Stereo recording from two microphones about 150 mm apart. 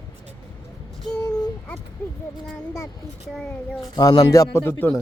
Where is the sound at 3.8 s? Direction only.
25° left (ahead or behind).